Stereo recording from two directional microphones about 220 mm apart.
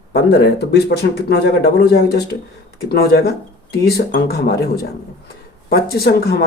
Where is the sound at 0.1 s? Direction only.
50° left (ahead or behind).